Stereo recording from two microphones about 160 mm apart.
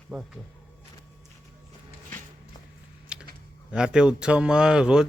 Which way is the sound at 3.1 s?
5° right (ahead or behind).